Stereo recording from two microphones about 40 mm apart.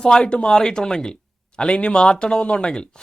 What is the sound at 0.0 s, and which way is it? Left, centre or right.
Speech, left.